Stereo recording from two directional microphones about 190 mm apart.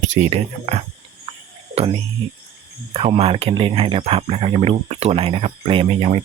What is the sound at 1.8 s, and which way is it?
Speech, 30° right (ahead or behind).